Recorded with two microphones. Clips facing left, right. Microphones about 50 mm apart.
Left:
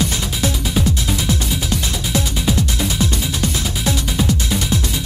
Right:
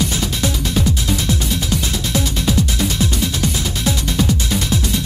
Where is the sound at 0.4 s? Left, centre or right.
Centre.